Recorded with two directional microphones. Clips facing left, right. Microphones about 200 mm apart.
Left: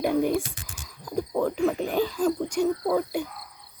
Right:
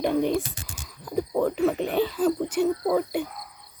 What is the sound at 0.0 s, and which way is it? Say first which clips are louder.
Whispering: even; 5° left (ahead or behind).